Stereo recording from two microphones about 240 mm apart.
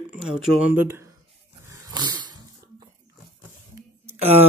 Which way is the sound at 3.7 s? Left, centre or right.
Right.